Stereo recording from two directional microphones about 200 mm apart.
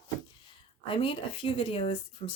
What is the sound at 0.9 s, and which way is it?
A woman's voice, 25° left (ahead or behind).